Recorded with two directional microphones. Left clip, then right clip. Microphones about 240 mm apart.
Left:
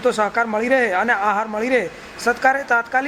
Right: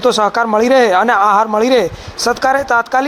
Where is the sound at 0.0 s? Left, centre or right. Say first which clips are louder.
Right 6 dB; centre.